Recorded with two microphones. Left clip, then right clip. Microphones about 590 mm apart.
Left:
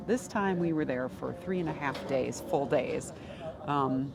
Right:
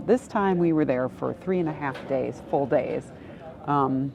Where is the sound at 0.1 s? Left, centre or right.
Right.